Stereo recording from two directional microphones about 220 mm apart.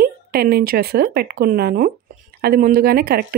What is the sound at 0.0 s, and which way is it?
Speech, 45° right (ahead or behind).